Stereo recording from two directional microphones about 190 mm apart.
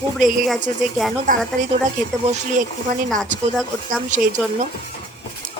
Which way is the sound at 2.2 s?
35° right (ahead or behind).